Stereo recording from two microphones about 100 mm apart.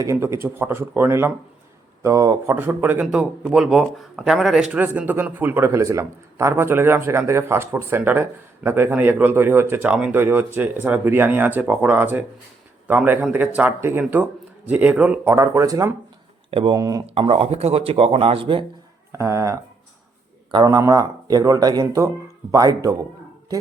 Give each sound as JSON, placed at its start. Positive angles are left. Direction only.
{"t": 0.0, "sound": "speech", "side_deg": -30}
{"t": 2.5, "sound": "speech", "side_deg": -20}
{"t": 4.7, "sound": "speech", "side_deg": -15}
{"t": 16.5, "sound": "speech", "side_deg": -65}
{"t": 16.7, "sound": "speech", "side_deg": -35}
{"t": 17.2, "sound": "speech", "side_deg": -70}
{"t": 19.1, "sound": "speech", "side_deg": -30}
{"t": 20.7, "sound": "speech", "side_deg": -35}